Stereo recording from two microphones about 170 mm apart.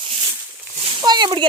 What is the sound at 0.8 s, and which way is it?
Speech, 25° right (ahead or behind).